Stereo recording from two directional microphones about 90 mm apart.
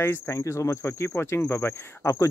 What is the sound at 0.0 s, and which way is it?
Speech, 30° left (ahead or behind).